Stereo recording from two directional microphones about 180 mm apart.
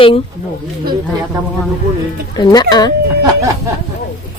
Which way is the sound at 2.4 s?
20° left (ahead or behind).